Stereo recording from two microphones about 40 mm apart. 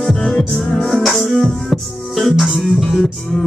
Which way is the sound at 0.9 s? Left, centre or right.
Centre.